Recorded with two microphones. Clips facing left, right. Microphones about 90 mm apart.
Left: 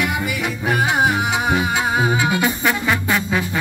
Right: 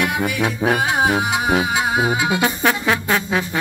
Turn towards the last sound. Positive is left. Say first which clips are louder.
# even
turn(degrees=-35)  # may be behind; listen again after turning